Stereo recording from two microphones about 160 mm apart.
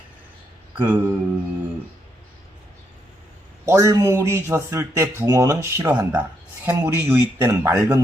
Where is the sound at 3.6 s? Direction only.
20° right (ahead or behind).